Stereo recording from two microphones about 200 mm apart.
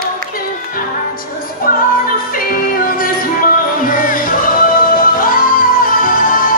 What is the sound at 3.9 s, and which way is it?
Music, 45° left (ahead or behind).